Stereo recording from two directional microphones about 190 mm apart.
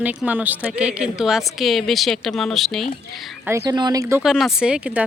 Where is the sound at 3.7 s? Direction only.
20° right (ahead or behind).